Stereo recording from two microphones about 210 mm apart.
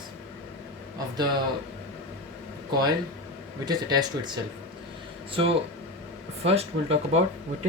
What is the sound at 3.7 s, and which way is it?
Speech, 20° right (ahead or behind).